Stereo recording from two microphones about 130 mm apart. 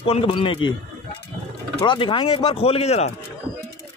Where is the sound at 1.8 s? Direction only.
40° left (ahead or behind).